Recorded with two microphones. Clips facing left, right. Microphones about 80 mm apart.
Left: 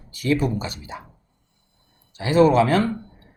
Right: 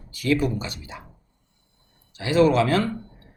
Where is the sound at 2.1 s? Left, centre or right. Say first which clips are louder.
Left 3 dB; left.